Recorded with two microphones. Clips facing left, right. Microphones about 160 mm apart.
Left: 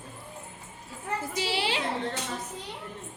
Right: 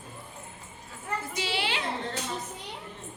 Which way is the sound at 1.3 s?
35° left (ahead or behind).